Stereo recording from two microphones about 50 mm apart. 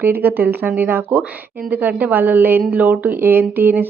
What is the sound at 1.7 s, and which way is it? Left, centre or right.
A woman's voice, right.